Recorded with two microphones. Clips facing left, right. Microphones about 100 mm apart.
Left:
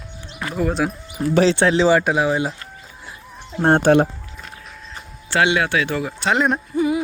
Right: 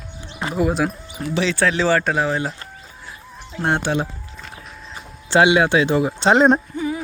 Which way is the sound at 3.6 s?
45° left (ahead or behind).